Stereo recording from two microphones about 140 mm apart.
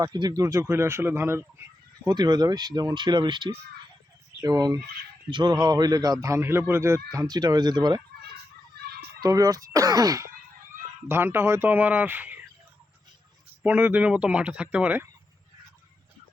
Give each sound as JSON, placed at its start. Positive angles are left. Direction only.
{"t": 0.0, "sound": "a man's voice", "side_deg": -30}
{"t": 2.0, "sound": "a man's voice", "side_deg": -30}
{"t": 9.2, "sound": "a man's voice", "side_deg": -25}
{"t": 11.1, "sound": "speech", "side_deg": -15}
{"t": 13.6, "sound": "speech", "side_deg": -10}